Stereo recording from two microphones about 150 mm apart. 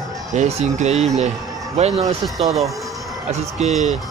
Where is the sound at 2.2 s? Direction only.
Centre (ahead or behind).